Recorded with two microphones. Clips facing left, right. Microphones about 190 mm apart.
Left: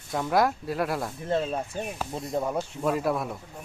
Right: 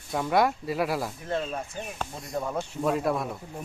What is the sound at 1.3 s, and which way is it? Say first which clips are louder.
Speech: left 5 dB; 25° left (ahead or behind).